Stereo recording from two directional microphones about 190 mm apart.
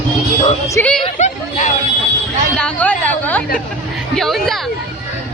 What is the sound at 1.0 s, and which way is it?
Chatter, 40° left (ahead or behind).